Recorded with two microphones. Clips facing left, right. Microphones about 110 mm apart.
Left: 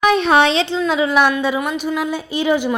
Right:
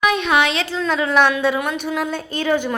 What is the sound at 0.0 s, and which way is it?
Speech, 35° left (ahead or behind).